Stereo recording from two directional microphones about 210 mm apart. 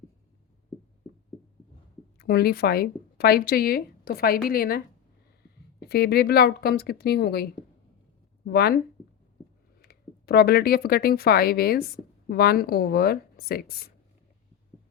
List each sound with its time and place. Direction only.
2.1 s a woman's voice: 50° left (ahead or behind)
5.8 s speech: 50° left (ahead or behind)
8.4 s speech: 50° left (ahead or behind)
9.8 s speech: 50° left (ahead or behind)